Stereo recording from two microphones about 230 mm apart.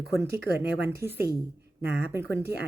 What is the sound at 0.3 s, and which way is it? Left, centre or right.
Speech, centre.